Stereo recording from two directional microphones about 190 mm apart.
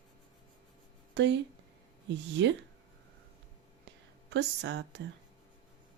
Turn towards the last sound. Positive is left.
turn(degrees=-65)  # may be behind; listen again after turning